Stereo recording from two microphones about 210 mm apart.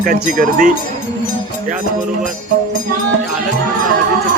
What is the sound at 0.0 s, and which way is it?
Speech, 40° right (ahead or behind).